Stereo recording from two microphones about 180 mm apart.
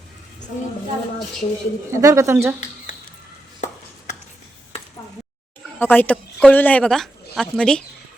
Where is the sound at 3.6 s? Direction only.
45° left (ahead or behind).